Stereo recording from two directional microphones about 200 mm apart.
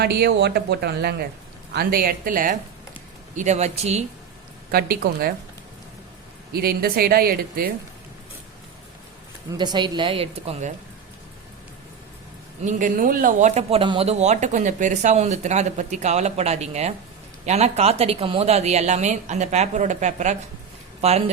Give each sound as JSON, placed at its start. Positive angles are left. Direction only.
{"t": 0.0, "sound": "speech", "side_deg": -55}
{"t": 4.7, "sound": "speech", "side_deg": -50}
{"t": 6.5, "sound": "speech", "side_deg": -50}
{"t": 9.5, "sound": "speech", "side_deg": -20}
{"t": 12.6, "sound": "speech", "side_deg": -40}